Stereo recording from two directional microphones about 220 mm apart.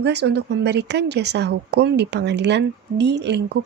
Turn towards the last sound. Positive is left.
turn(degrees=-50)  # may be behind; listen again after turning